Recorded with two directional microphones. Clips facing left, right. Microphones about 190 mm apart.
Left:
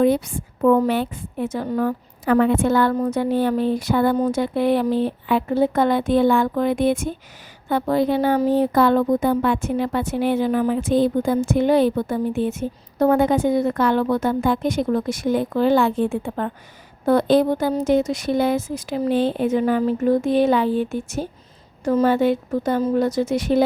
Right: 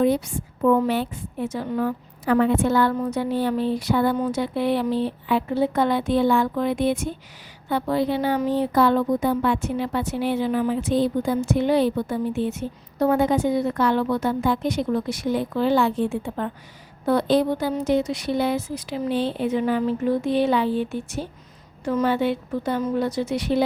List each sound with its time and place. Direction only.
0.0 s a woman's voice: 55° left (ahead or behind)